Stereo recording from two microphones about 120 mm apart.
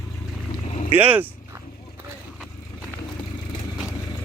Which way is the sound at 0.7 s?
60° left (ahead or behind).